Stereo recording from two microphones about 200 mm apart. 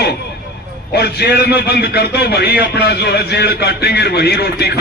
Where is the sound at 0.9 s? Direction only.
55° left (ahead or behind).